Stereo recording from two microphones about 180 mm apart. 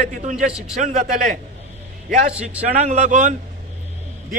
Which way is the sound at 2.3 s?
5° right (ahead or behind).